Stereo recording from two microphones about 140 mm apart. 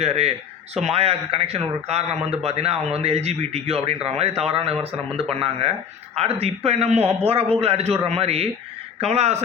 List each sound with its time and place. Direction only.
0.0 s a man's voice: 50° right (ahead or behind)